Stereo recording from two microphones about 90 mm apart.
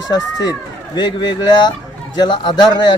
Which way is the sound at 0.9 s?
55° left (ahead or behind).